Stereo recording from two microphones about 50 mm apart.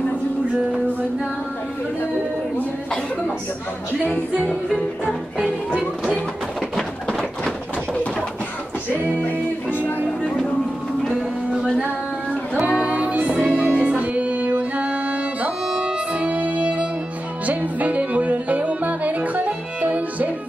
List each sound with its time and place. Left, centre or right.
9.2 s music: left
12.6 s music: right